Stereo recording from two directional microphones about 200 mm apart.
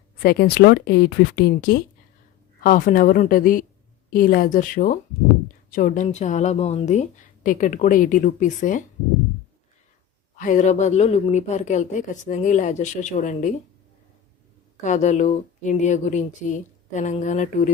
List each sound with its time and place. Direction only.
0.2 s a woman's voice: 50° left (ahead or behind)
10.3 s a woman's voice: 40° left (ahead or behind)
14.8 s a woman's voice: 35° left (ahead or behind)